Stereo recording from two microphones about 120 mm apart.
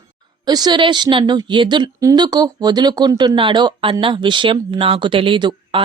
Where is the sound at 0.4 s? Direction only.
35° right (ahead or behind).